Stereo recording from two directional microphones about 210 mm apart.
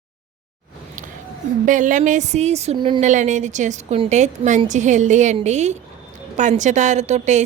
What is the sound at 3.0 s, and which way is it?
A woman's voice, 35° right (ahead or behind).